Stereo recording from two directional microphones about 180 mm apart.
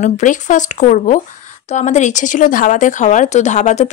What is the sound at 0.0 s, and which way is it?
Speech, 45° left (ahead or behind).